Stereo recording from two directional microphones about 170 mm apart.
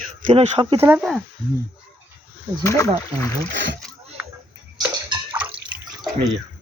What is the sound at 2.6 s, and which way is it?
Speech, 20° left (ahead or behind).